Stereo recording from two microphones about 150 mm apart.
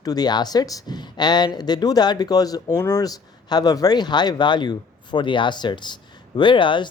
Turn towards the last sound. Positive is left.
turn(degrees=35)  # may be behind; listen again after turning